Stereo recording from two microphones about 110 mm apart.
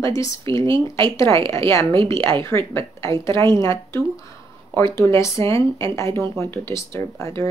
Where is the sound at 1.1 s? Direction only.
25° left (ahead or behind).